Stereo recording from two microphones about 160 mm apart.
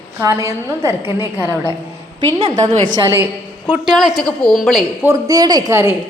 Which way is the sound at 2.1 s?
30° right (ahead or behind).